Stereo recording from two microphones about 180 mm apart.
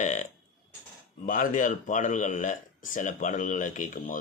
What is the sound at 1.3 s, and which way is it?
Speech, 45° left (ahead or behind).